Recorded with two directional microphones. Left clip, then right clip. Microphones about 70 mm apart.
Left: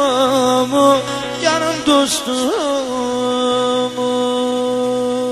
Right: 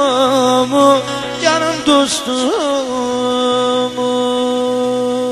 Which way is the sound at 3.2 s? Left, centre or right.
Right.